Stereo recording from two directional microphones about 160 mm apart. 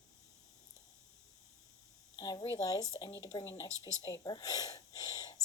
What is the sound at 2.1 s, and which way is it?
A woman's voice, 25° left (ahead or behind).